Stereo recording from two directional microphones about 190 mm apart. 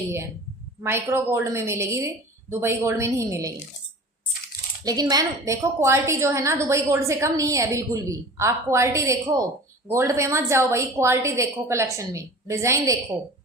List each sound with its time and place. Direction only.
0.8 s a woman's voice: 15° right (ahead or behind)
4.9 s a woman's voice: 20° right (ahead or behind)